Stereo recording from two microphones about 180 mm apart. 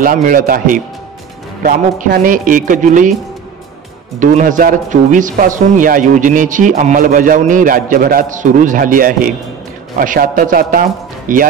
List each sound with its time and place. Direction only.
0.0 s speech: 50° right (ahead or behind)
4.2 s speech: 45° right (ahead or behind)